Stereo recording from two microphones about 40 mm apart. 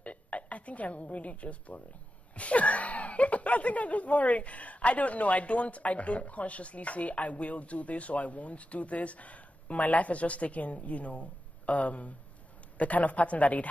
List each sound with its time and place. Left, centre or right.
0.0 s a woman's voice: left